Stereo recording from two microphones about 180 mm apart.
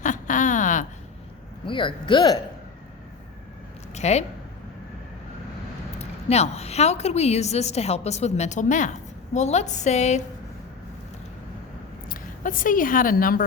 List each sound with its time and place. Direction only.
0.0 s a sound: 45° left (ahead or behind)
1.6 s speech: 30° left (ahead or behind)
3.9 s speech: 40° left (ahead or behind)
6.0 s a woman's voice: 35° left (ahead or behind)
12.0 s speech: 50° left (ahead or behind)